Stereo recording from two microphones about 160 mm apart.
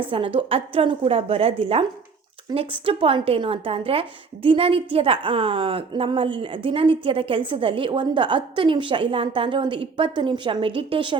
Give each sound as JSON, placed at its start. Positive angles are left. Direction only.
{"t": 0.0, "sound": "a woman's voice", "side_deg": -35}